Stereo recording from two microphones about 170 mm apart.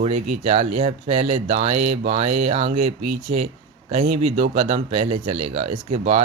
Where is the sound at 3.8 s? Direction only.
35° right (ahead or behind).